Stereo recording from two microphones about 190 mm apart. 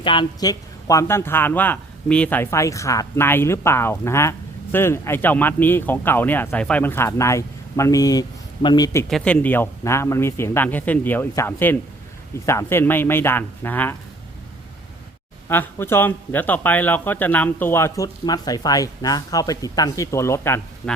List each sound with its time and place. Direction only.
0.0 s speech: 25° left (ahead or behind)
9.0 s speech: 5° left (ahead or behind)
15.4 s speech: 10° left (ahead or behind)